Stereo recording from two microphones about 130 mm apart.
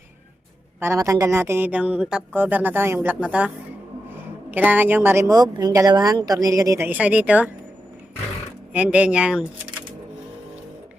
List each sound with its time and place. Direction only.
0.8 s a woman's voice: 20° right (ahead or behind)
4.5 s a woman's voice: 15° right (ahead or behind)
5.3 s speech: 30° right (ahead or behind); by 7.5 s 10° right (ahead or behind)
8.7 s a woman's voice: 10° right (ahead or behind)